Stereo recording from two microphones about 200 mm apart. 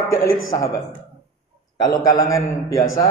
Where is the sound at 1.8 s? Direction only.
20° left (ahead or behind).